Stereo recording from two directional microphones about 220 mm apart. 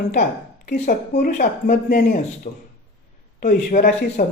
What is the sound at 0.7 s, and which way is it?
Speech, 40° left (ahead or behind).